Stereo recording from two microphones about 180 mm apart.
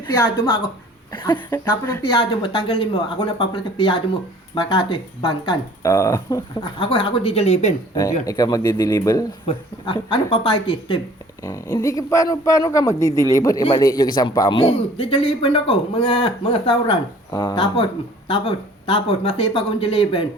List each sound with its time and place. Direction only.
0.0 s a man's voice: 20° left (ahead or behind)
6.7 s speech: 30° left (ahead or behind)
8.3 s a man's voice: 20° left (ahead or behind)
11.4 s a man's voice: 20° left (ahead or behind)